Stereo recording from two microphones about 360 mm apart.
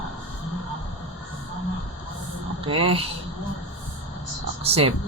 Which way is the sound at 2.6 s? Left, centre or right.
Centre.